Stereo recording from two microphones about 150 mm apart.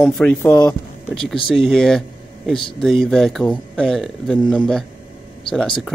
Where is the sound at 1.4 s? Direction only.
Centre (ahead or behind).